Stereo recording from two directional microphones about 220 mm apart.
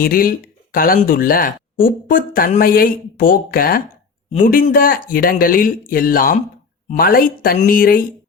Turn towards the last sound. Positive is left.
turn(degrees=40)  # may be behind; listen again after turning